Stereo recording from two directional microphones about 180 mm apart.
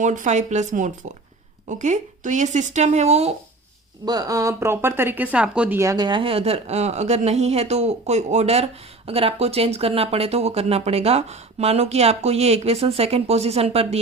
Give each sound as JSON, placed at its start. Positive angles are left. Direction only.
{"t": 0.0, "sound": "speech", "side_deg": -45}
{"t": 4.0, "sound": "speech", "side_deg": -20}